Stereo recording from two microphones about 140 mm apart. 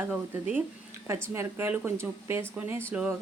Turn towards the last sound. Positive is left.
turn(degrees=-10)  # may be behind; listen again after turning